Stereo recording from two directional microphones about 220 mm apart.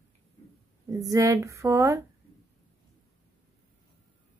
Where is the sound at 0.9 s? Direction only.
15° right (ahead or behind).